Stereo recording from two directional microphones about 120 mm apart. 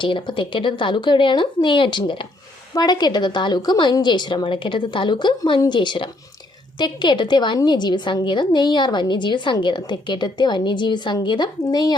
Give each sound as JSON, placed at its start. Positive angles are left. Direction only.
{"t": 0.0, "sound": "a woman's voice", "side_deg": 45}